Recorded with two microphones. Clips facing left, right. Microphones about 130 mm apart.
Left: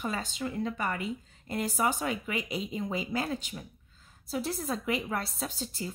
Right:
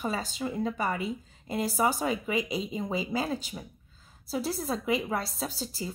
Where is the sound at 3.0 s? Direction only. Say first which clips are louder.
Right 2 dB; 5° right (ahead or behind).